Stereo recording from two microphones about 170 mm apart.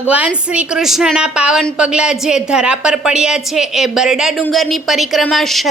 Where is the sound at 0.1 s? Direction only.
5° right (ahead or behind).